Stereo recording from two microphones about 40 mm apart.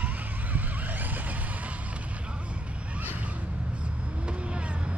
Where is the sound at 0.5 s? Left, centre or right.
Right.